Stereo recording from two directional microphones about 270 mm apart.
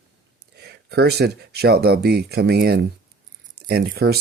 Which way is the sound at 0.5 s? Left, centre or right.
Right.